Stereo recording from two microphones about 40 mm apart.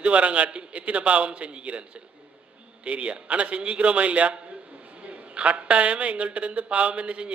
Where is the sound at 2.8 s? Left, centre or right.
Right.